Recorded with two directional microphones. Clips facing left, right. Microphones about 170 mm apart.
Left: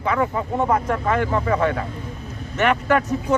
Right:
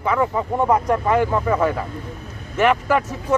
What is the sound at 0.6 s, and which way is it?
Speech, 15° right (ahead or behind).